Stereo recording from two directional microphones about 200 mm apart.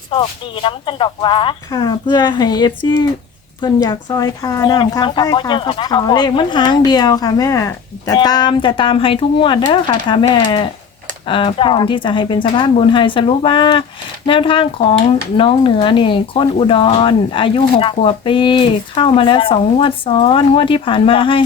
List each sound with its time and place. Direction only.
0.1 s speech: 25° left (ahead or behind)